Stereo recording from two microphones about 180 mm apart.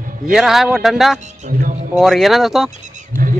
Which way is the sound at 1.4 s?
45° right (ahead or behind).